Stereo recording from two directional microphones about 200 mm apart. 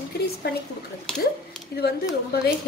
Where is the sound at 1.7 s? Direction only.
50° left (ahead or behind).